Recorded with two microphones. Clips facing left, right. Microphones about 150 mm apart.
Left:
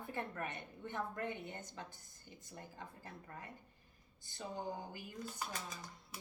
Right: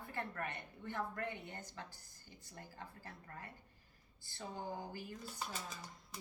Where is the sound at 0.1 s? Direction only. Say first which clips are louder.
Even; 20° left (ahead or behind).